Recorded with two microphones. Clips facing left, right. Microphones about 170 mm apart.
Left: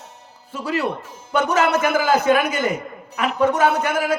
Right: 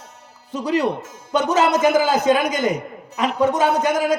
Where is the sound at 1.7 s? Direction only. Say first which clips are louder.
Right 2 dB; 15° right (ahead or behind).